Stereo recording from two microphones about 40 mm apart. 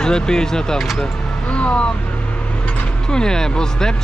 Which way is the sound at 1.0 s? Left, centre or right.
Left.